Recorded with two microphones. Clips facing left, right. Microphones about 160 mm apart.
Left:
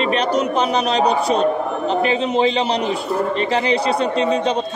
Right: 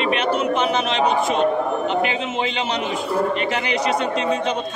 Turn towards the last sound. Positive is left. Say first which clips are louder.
# left 3 dB
turn(degrees=35)  # may be behind; listen again after turning